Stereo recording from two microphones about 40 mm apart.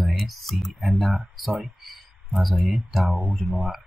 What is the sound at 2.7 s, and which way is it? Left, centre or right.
Speech, centre.